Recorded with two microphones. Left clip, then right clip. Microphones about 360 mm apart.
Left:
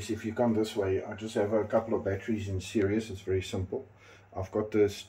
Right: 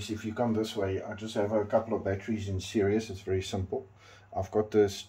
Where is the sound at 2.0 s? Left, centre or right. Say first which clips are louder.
Even; right.